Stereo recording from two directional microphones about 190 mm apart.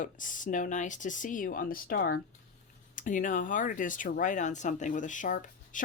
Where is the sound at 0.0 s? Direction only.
45° left (ahead or behind).